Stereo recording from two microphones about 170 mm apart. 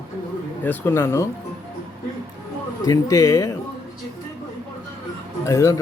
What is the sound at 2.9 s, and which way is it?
Speech, 20° left (ahead or behind).